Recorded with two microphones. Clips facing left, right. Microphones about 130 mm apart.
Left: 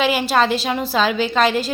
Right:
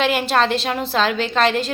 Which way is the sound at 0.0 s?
5° left (ahead or behind).